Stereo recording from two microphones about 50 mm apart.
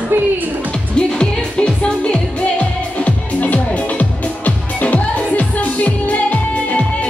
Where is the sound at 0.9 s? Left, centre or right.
Centre.